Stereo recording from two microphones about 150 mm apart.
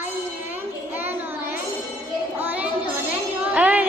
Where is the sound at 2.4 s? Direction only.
10° right (ahead or behind).